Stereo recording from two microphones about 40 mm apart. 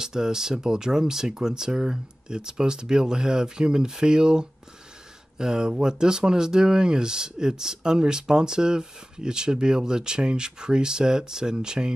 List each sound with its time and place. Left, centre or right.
0.0 s speech: centre